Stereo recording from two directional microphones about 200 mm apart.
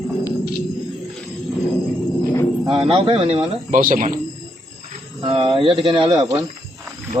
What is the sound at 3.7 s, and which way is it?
Speech, 45° right (ahead or behind).